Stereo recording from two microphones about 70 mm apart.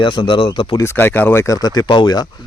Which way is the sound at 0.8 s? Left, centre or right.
Left.